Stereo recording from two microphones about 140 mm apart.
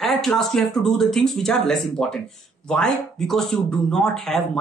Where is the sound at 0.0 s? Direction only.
Centre (ahead or behind).